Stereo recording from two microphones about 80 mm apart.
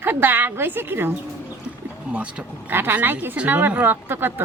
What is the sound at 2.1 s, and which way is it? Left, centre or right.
A woman's voice, centre.